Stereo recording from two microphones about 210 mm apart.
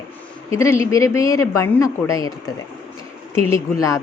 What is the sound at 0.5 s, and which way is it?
A woman's voice, 15° left (ahead or behind).